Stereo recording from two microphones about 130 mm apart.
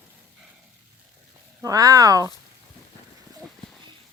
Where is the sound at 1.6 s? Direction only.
25° right (ahead or behind).